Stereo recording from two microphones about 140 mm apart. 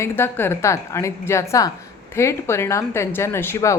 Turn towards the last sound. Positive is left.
turn(degrees=20)  # may be behind; listen again after turning